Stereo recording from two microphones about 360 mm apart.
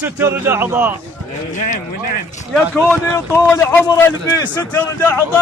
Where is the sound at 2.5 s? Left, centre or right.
Centre.